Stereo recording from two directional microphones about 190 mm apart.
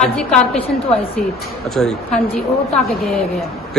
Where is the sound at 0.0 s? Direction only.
5° left (ahead or behind).